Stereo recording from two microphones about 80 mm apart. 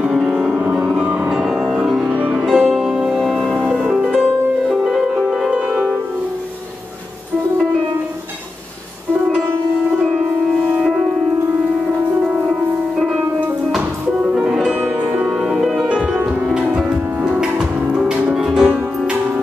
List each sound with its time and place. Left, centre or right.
0.0 s music: centre
2.1 s music: centre
2.5 s music: centre
3.7 s music: centre
14.3 s music: centre